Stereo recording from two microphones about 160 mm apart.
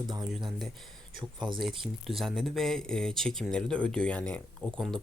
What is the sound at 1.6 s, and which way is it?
Speech, centre (ahead or behind).